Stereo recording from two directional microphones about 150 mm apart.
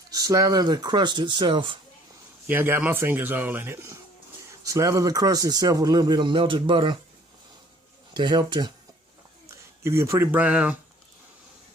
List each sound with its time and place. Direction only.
0.1 s speech: 25° right (ahead or behind)
2.5 s a man's voice: 15° right (ahead or behind); by 7.0 s 35° right (ahead or behind)
8.1 s speech: 30° right (ahead or behind)
9.8 s a man's voice: 20° right (ahead or behind)